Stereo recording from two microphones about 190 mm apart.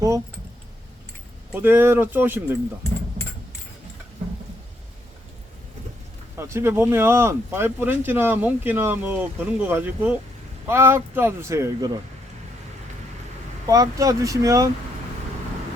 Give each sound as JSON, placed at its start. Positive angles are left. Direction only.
{"t": 1.5, "sound": "speech", "side_deg": -10}
{"t": 6.3, "sound": "speech", "side_deg": -15}
{"t": 13.7, "sound": "speech", "side_deg": -20}